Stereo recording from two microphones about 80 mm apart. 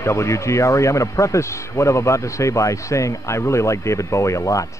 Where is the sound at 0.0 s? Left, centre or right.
Left.